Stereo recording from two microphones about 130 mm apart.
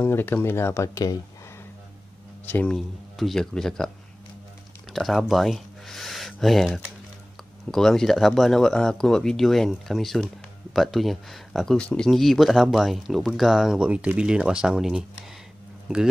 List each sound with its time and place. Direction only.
0.0 s speech: 15° left (ahead or behind)
2.4 s speech: 10° left (ahead or behind)
4.9 s a sound: centre (ahead or behind)
7.7 s speech: 5° left (ahead or behind)